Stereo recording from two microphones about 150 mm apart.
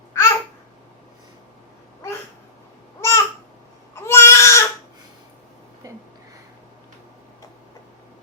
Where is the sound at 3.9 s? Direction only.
15° left (ahead or behind).